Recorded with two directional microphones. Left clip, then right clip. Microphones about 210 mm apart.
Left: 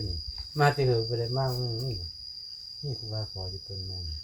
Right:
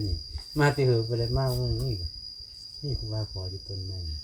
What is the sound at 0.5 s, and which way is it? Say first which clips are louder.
Cricket: even; 45° right (ahead or behind).